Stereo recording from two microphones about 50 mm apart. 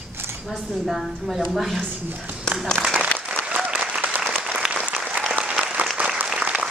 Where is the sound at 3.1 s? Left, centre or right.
Left.